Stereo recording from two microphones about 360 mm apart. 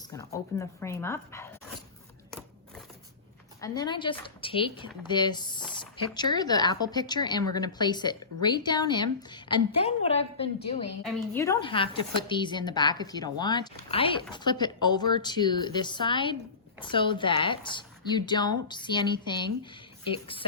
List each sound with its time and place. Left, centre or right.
0.2 s speech: centre
3.6 s speech: centre